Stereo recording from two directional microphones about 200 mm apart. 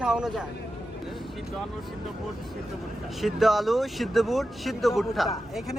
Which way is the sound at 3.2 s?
Centre (ahead or behind).